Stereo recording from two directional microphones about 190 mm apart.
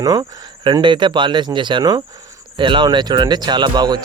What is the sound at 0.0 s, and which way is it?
Speech, 20° right (ahead or behind).